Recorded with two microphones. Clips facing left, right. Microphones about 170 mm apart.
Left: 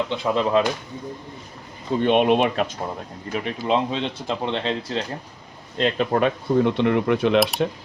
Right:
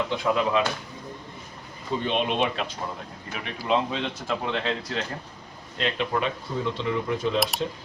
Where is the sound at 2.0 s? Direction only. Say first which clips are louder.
Left 8 dB; 55° left (ahead or behind).